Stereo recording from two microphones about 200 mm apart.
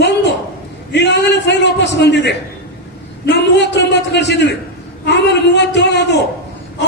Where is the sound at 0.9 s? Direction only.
60° left (ahead or behind).